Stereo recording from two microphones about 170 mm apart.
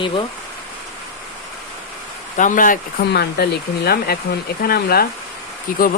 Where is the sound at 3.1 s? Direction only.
70° left (ahead or behind).